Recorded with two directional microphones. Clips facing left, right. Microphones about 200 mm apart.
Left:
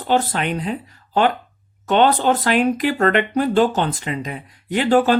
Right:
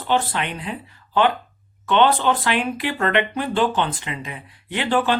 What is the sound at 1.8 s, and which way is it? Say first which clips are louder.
Speech: left 2 dB; 40° left (ahead or behind).